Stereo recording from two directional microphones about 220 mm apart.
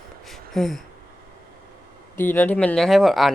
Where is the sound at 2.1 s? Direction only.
10° left (ahead or behind).